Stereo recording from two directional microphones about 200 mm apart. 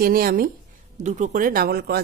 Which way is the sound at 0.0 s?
45° right (ahead or behind).